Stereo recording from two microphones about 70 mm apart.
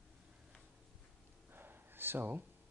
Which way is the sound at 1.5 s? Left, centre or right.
Right.